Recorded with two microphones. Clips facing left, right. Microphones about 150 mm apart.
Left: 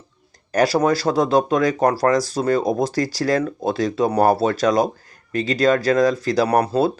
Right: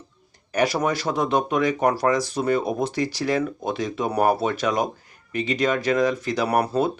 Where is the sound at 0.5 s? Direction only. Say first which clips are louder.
Left 5 dB; 35° left (ahead or behind).